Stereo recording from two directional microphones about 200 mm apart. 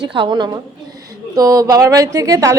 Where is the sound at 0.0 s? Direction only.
25° right (ahead or behind).